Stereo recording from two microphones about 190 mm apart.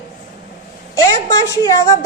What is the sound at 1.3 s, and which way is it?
Speech, 15° left (ahead or behind).